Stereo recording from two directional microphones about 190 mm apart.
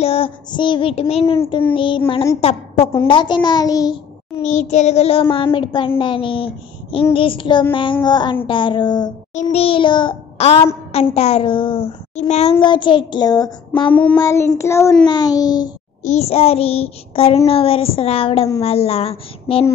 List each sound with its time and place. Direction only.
0.0 s female singing: 30° left (ahead or behind)
1.7 s a child's voice: 25° left (ahead or behind)
4.4 s child singing: 35° left (ahead or behind)
5.3 s a child's voice: 25° left (ahead or behind)
9.3 s child singing: 35° left (ahead or behind)
10.9 s a child's voice: 30° left (ahead or behind)
13.8 s child singing: 10° left (ahead or behind)
15.0 s a child's voice: 20° left (ahead or behind)
16.0 s child singing: 35° left (ahead or behind)